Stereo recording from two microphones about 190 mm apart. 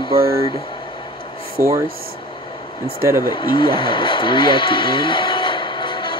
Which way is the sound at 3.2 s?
25° left (ahead or behind).